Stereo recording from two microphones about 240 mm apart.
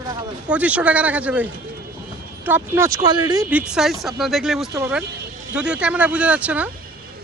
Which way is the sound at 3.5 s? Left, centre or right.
Centre.